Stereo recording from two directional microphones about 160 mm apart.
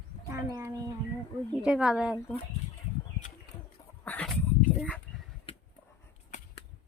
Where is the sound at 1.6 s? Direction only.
5° right (ahead or behind).